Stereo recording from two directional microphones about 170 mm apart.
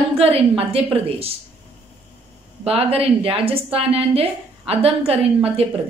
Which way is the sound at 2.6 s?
35° right (ahead or behind).